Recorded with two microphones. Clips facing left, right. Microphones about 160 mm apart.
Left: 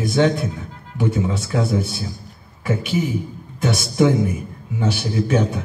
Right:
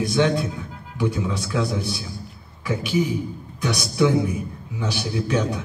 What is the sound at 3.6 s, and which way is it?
A man's voice, 50° left (ahead or behind).